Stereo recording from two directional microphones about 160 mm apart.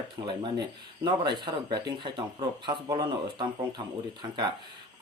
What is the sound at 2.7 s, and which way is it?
Speech, 25° right (ahead or behind).